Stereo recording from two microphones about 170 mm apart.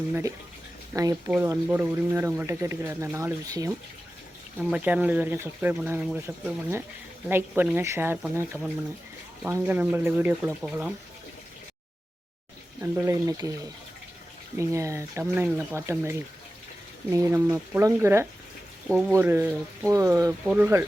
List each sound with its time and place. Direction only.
0.1 s speech: 15° right (ahead or behind)
4.7 s speech: 10° right (ahead or behind)
12.8 s speech: 15° right (ahead or behind)
14.5 s speech: 15° right (ahead or behind)
20.4 s speech: 10° right (ahead or behind)